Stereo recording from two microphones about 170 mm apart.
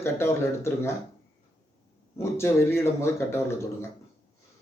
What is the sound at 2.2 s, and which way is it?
Speech, 15° left (ahead or behind).